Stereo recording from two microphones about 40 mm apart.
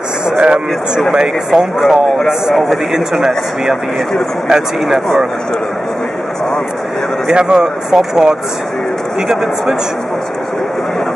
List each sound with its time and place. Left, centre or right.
0.4 s speech: centre
7.2 s speech: right; by 9.8 s centre